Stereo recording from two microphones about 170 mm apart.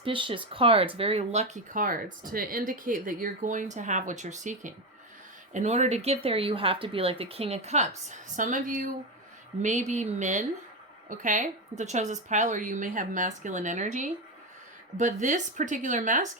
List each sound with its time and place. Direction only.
0.0 s speech: 30° right (ahead or behind); by 16.3 s 50° right (ahead or behind)